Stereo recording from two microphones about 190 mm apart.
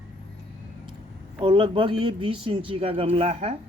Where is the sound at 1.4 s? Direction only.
25° right (ahead or behind).